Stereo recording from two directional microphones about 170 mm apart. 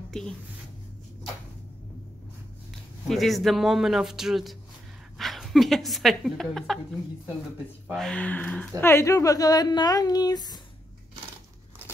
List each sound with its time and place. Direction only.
0.1 s speech: 5° left (ahead or behind)
3.1 s speech: centre (ahead or behind)
7.9 s speech: 5° left (ahead or behind); by 10.6 s 25° left (ahead or behind)